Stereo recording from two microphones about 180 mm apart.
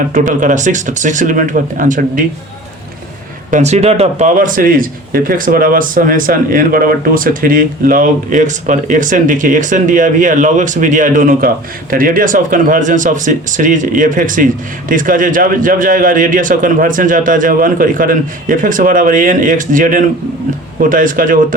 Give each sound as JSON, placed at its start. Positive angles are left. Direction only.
{"t": 0.1, "sound": "speech", "side_deg": -45}
{"t": 3.5, "sound": "speech", "side_deg": -40}
{"t": 4.4, "sound": "speech", "side_deg": -50}